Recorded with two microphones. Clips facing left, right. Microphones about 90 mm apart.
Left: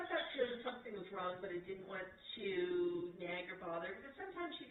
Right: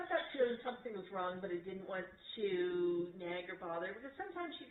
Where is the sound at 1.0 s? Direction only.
30° right (ahead or behind).